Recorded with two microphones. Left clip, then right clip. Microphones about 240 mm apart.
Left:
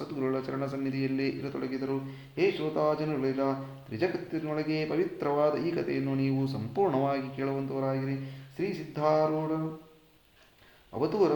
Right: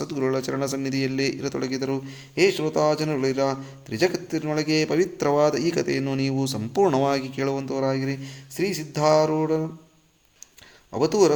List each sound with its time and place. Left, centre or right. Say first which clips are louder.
0.0 s a man's voice: right 7 dB; right
10.9 s a man's voice: right 7 dB; right